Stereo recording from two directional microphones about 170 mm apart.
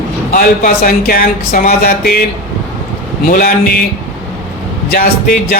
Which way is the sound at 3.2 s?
60° left (ahead or behind).